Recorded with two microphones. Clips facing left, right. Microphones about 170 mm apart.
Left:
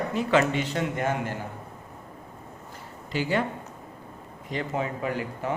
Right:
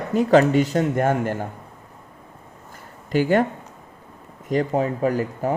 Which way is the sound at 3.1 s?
50° right (ahead or behind).